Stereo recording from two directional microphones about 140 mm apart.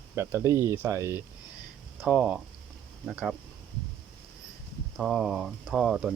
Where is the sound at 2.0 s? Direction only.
5° right (ahead or behind).